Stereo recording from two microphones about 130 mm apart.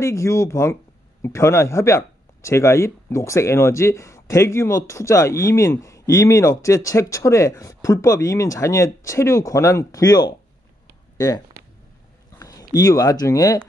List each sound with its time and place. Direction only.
0.0 s speech: 20° left (ahead or behind)